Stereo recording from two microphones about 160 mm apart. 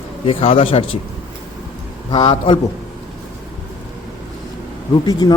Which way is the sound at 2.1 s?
30° left (ahead or behind).